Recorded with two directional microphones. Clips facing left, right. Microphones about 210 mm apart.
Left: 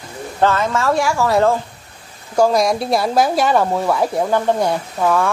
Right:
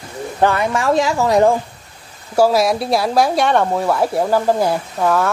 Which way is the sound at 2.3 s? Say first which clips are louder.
Right 1 dB; 5° right (ahead or behind).